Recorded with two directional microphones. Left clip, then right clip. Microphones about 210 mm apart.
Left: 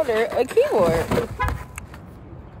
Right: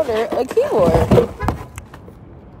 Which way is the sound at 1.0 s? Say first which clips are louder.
Right 8 dB; 50° right (ahead or behind).